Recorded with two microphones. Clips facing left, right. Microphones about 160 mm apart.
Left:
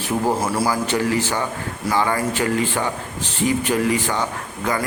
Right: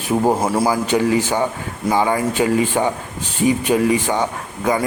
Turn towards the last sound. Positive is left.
turn(degrees=-20)  # may be behind; listen again after turning